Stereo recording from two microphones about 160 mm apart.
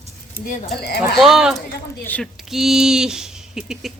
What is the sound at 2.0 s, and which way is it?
Speech, 10° left (ahead or behind).